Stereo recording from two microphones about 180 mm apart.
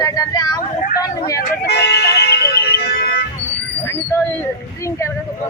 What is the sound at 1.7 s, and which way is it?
Music, 65° left (ahead or behind).